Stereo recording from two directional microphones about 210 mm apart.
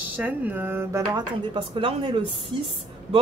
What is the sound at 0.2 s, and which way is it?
Speech, 10° right (ahead or behind).